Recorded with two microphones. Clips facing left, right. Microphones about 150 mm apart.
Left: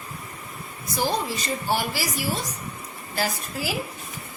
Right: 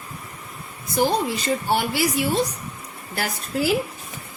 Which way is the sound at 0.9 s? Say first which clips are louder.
Right 5 dB; 60° right (ahead or behind).